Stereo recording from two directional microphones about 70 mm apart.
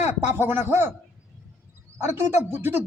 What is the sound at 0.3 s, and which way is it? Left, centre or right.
Speech, right.